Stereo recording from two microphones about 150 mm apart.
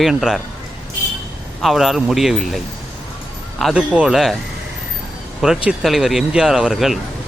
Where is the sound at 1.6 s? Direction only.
Centre (ahead or behind).